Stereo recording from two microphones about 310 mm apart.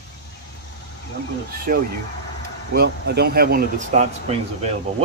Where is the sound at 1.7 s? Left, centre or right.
Right.